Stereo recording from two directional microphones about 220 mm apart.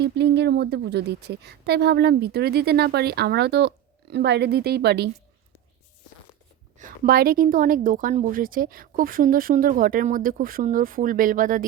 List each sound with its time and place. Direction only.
0.0 s a woman's voice: 50° right (ahead or behind)
6.7 s a woman's voice: 40° right (ahead or behind)